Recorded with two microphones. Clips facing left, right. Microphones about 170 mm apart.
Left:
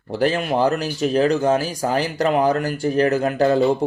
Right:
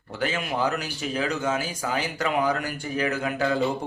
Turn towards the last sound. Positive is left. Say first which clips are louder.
# left 8 dB
turn(degrees=40)  # may be behind; listen again after turning